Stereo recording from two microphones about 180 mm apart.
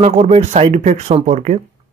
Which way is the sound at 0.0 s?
40° right (ahead or behind).